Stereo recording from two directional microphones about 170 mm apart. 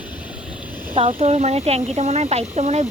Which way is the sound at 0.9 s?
35° right (ahead or behind).